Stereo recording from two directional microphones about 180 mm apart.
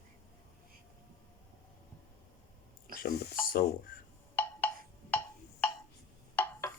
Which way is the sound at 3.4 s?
55° left (ahead or behind).